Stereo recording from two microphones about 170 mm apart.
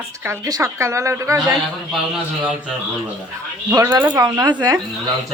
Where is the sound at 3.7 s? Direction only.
20° right (ahead or behind).